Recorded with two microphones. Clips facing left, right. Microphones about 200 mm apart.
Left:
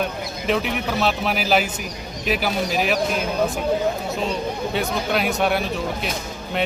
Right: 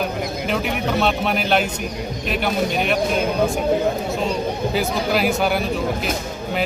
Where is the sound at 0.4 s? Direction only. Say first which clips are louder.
Left 2 dB; centre (ahead or behind).